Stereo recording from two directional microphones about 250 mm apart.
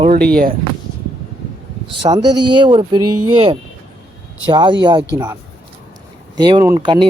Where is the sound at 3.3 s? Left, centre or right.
Right.